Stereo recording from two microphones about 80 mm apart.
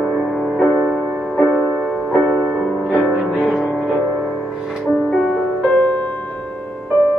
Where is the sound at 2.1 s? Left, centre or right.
Centre.